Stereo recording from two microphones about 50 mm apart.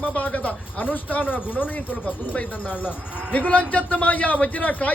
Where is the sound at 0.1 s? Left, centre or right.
Left.